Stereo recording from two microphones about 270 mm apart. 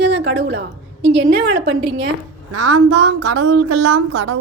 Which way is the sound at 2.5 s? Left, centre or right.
Right.